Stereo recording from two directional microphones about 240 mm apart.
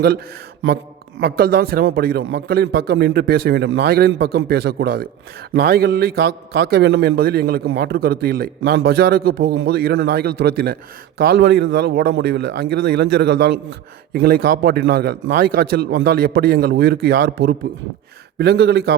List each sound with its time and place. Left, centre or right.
1.2 s a man's voice: right